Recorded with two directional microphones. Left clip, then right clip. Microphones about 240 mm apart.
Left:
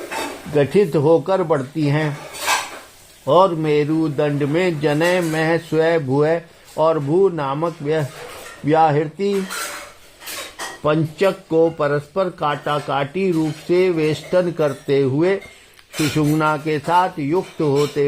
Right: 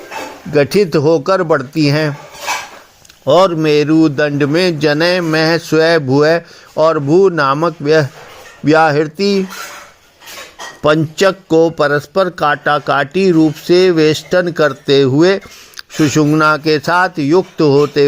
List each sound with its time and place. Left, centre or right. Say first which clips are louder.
0.5 s a man's voice: right 5 dB; right
3.2 s speech: right 4 dB; right
3.6 s a man's voice: right 7 dB; right
10.8 s speech: right 6 dB; right
13.2 s a man's voice: right 9 dB; right